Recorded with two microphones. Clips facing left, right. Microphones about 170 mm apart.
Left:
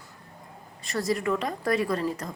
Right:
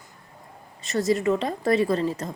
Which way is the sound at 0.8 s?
25° right (ahead or behind).